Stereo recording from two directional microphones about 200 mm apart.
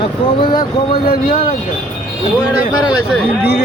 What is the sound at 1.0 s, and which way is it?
Speech, 50° left (ahead or behind).